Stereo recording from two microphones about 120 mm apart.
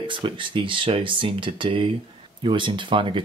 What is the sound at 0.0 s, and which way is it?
Speech, 45° right (ahead or behind).